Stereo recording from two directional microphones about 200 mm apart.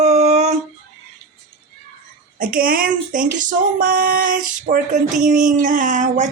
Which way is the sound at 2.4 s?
45° right (ahead or behind).